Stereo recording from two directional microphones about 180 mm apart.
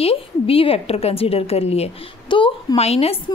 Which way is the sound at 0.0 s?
30° left (ahead or behind).